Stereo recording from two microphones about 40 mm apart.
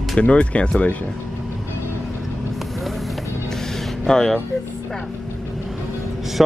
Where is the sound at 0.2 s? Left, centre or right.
Left.